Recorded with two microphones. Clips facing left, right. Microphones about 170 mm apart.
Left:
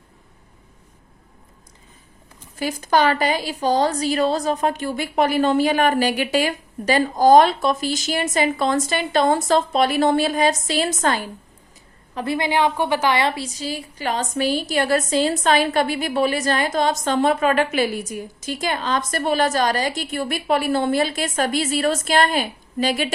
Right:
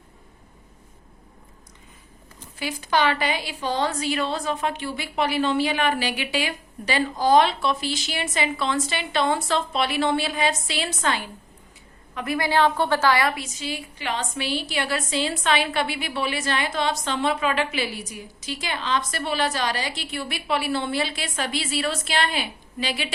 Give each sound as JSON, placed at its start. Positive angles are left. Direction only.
{"t": 2.6, "sound": "a woman's voice", "side_deg": 45}
{"t": 12.1, "sound": "a woman's voice", "side_deg": 30}
{"t": 12.5, "sound": "a woman's voice", "side_deg": 15}